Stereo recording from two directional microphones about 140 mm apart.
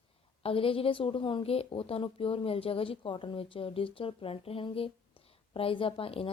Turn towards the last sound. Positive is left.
turn(degrees=40)  # may be behind; listen again after turning